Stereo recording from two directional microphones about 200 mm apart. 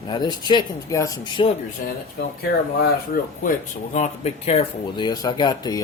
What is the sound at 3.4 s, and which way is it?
Speech, 40° left (ahead or behind).